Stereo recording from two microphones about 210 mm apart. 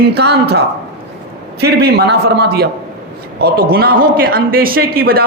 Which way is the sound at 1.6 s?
50° right (ahead or behind).